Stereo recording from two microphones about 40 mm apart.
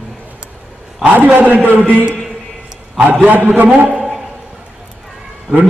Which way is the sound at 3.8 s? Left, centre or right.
Centre.